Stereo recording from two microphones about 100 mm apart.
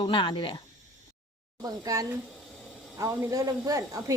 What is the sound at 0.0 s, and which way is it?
Speech, 55° left (ahead or behind).